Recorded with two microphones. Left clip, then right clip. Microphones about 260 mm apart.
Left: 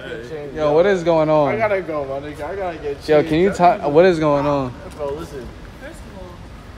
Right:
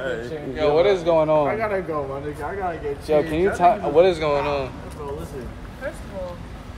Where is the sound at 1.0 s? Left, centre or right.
Left.